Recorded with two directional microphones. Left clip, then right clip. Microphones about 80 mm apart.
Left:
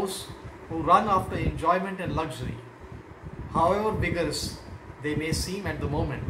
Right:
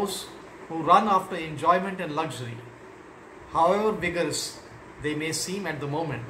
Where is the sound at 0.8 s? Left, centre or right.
Right.